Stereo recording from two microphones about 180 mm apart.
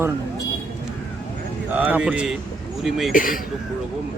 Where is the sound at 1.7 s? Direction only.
10° right (ahead or behind).